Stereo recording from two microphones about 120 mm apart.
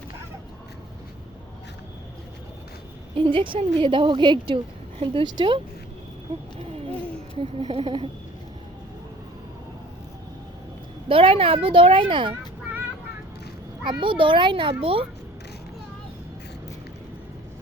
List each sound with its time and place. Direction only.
3.2 s a woman's voice: 45° right (ahead or behind)
7.3 s a woman's voice: 50° right (ahead or behind)
11.1 s a woman's voice: 50° right (ahead or behind)
13.8 s a woman's voice: 45° right (ahead or behind)